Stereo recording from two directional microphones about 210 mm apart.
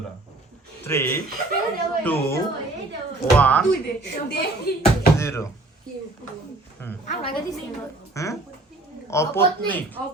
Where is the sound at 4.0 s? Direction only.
50° left (ahead or behind).